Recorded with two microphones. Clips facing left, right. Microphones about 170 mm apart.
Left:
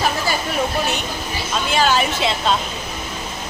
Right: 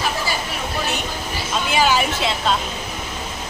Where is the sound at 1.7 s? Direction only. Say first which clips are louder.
Even; 10° right (ahead or behind).